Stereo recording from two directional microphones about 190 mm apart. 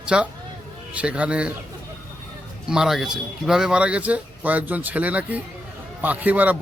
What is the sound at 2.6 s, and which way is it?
A man's voice, 5° right (ahead or behind).